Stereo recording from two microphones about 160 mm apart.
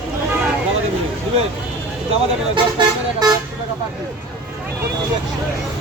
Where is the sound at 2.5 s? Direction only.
30° right (ahead or behind).